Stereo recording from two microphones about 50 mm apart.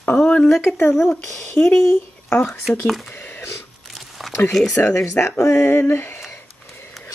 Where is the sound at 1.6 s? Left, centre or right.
Left.